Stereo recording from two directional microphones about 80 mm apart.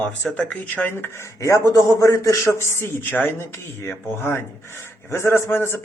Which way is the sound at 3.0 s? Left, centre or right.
Left.